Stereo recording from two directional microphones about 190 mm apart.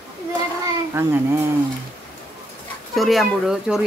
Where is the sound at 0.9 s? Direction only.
15° right (ahead or behind).